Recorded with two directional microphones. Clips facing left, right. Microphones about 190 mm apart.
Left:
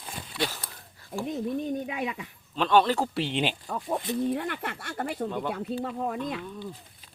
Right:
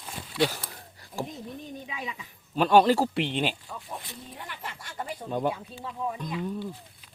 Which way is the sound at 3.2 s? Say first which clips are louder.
Even; centre (ahead or behind).